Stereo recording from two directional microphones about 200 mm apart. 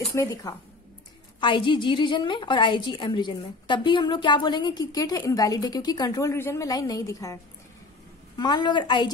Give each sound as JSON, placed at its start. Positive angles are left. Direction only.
{"t": 0.1, "sound": "a woman's voice", "side_deg": 15}
{"t": 8.4, "sound": "a woman's voice", "side_deg": 20}